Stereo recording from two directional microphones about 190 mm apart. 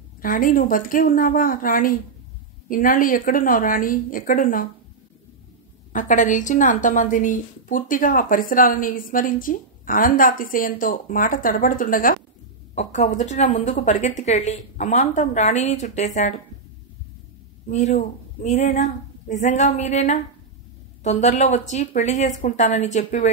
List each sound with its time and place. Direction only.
0.2 s a woman's voice: 45° left (ahead or behind)
5.9 s a woman's voice: 45° left (ahead or behind)
17.6 s a woman's voice: 40° left (ahead or behind)